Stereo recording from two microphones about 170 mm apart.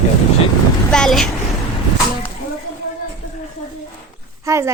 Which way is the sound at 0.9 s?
5° left (ahead or behind).